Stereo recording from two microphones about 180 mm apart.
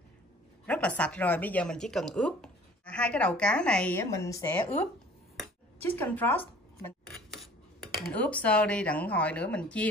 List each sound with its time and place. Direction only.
0.7 s speech: 5° left (ahead or behind)
4.0 s speech: 15° left (ahead or behind)
5.4 s a sound: 10° left (ahead or behind)
7.8 s speech: centre (ahead or behind)